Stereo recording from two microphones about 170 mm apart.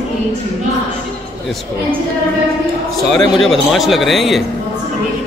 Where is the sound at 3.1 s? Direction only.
Centre (ahead or behind).